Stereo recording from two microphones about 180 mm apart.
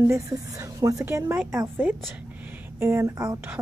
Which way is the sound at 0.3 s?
25° right (ahead or behind).